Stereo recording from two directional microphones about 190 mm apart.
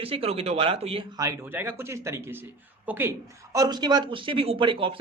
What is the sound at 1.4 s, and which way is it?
Speech, 10° right (ahead or behind).